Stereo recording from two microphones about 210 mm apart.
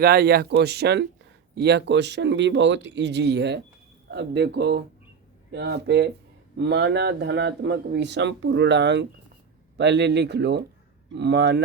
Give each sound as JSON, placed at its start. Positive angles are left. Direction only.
{"t": 0.0, "sound": "speech", "side_deg": -50}